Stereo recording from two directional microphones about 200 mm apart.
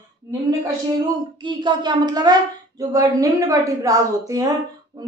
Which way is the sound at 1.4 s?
25° right (ahead or behind).